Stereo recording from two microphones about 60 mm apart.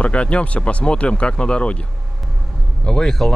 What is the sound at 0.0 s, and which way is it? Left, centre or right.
Speech, centre.